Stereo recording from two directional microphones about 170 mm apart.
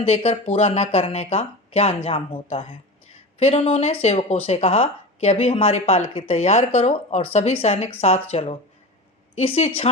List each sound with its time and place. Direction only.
0.0 s speech: 35° left (ahead or behind)